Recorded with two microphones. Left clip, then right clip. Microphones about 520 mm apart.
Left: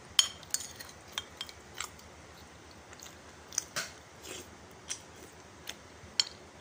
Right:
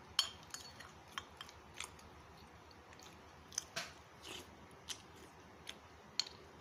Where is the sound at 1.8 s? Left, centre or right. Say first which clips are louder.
Left 7 dB; right.